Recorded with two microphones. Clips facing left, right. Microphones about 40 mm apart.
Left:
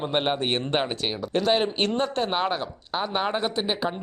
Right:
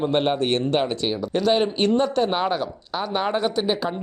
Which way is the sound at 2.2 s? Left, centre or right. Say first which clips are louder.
Right 3 dB; centre.